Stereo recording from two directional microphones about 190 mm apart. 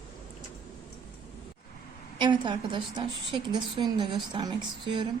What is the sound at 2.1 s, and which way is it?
A woman's voice, 25° right (ahead or behind).